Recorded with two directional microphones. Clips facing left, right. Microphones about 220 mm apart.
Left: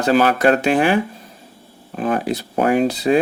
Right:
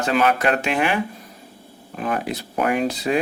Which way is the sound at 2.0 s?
35° left (ahead or behind).